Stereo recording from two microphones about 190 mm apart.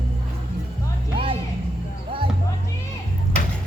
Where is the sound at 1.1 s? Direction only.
30° right (ahead or behind).